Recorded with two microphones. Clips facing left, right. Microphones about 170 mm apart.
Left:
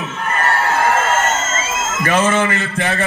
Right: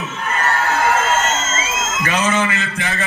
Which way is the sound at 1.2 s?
55° left (ahead or behind).